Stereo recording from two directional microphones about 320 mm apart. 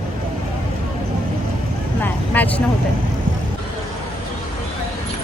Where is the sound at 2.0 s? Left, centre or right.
Centre.